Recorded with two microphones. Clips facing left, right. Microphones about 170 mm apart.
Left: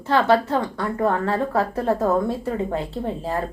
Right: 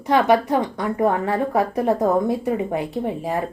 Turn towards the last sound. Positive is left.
turn(degrees=-15)  # may be behind; listen again after turning